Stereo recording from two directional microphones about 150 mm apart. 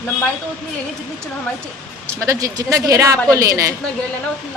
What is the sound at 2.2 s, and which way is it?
A man's voice, 25° right (ahead or behind).